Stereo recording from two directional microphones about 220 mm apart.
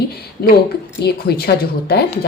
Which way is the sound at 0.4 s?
45° left (ahead or behind).